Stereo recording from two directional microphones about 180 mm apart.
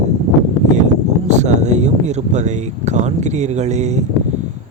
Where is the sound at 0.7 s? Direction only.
40° right (ahead or behind).